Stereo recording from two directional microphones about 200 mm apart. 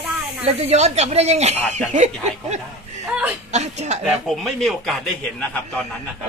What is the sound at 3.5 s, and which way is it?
Speech, 35° right (ahead or behind).